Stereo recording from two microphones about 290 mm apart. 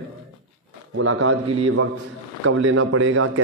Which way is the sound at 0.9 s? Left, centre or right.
Right.